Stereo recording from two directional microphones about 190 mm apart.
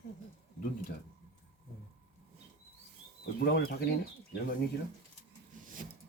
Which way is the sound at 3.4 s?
55° left (ahead or behind).